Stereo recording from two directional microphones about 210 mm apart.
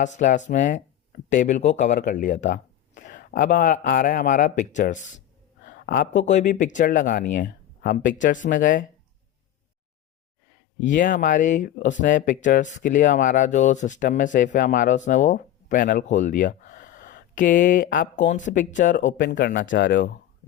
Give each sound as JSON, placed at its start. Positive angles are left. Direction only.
{"t": 0.0, "sound": "speech", "side_deg": 35}
{"t": 10.8, "sound": "speech", "side_deg": 40}
{"t": 19.4, "sound": "speech", "side_deg": 50}